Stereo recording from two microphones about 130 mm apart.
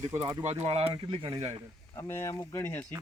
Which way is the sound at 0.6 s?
45° right (ahead or behind).